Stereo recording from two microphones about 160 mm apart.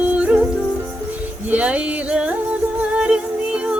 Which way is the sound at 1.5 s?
10° right (ahead or behind).